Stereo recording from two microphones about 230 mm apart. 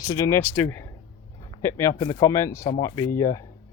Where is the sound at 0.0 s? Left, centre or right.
Centre.